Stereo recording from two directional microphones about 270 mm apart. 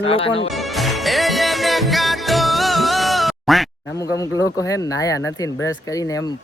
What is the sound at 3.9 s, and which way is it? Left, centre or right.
A man's voice, centre.